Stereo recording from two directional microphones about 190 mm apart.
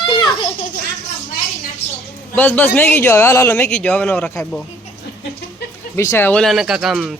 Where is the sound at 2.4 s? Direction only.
10° left (ahead or behind).